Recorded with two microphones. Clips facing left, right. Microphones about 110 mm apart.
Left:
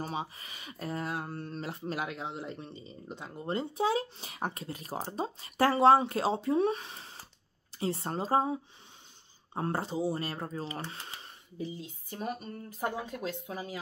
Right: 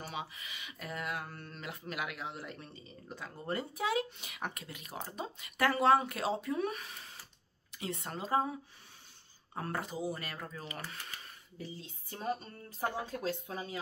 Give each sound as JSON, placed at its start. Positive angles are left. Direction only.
{"t": 0.0, "sound": "speech", "side_deg": 35}
{"t": 12.4, "sound": "speech", "side_deg": -30}